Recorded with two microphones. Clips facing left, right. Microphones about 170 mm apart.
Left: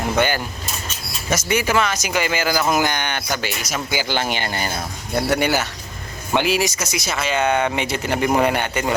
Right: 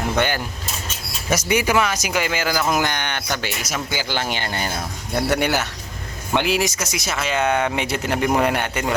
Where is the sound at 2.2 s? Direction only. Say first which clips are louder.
Left 2 dB; centre (ahead or behind).